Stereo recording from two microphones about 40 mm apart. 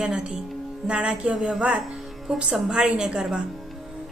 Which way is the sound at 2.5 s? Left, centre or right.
Right.